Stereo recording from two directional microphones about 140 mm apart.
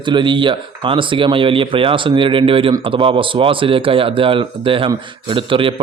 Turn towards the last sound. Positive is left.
turn(degrees=-40)  # may be behind; listen again after turning